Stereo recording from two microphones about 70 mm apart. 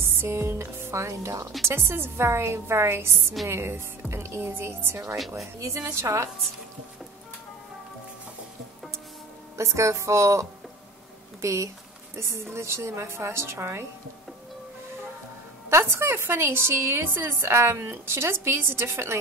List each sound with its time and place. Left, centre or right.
0.0 s music: right
1.7 s a woman's voice: right
9.6 s speech: right
11.4 s a woman's voice: right
15.7 s a woman's voice: right